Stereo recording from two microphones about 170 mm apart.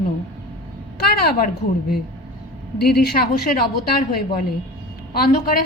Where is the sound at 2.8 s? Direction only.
65° left (ahead or behind).